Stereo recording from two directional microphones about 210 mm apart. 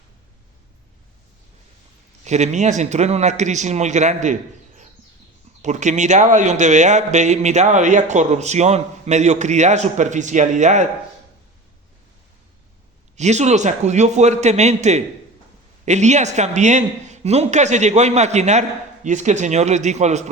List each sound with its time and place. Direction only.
2.2 s a man's voice: 35° right (ahead or behind)
5.6 s a man's voice: 35° right (ahead or behind)
13.1 s a man's voice: 35° right (ahead or behind)